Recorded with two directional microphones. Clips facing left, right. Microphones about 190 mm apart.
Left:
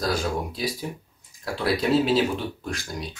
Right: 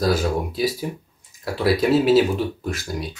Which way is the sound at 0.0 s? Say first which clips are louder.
Right 5 dB; 5° right (ahead or behind).